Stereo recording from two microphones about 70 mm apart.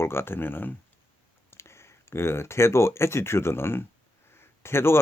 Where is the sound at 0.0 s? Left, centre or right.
Left.